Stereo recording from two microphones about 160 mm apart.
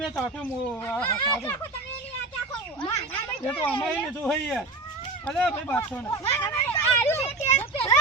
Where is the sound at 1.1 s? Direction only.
25° left (ahead or behind).